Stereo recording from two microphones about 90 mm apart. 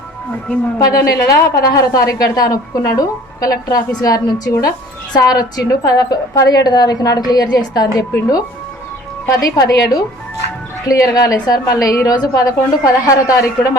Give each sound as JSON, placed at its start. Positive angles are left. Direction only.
{"t": 0.8, "sound": "a woman's voice", "side_deg": 40}
{"t": 9.4, "sound": "a woman's voice", "side_deg": 45}